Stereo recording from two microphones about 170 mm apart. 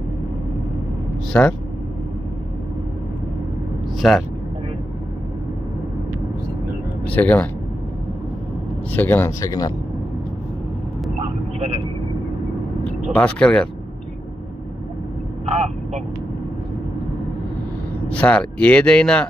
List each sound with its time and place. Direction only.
1.3 s speech: 15° left (ahead or behind)
4.0 s speech: centre (ahead or behind)
7.1 s speech: 10° left (ahead or behind)
8.9 s speech: 10° left (ahead or behind)
13.1 s speech: 5° left (ahead or behind)
18.0 s speech: 5° left (ahead or behind)